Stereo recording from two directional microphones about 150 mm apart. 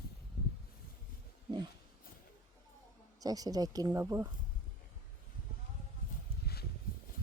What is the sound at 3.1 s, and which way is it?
A woman's voice, 25° right (ahead or behind).